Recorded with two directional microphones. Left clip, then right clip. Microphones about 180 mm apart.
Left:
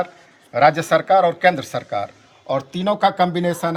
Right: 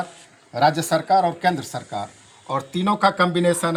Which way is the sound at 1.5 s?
15° left (ahead or behind).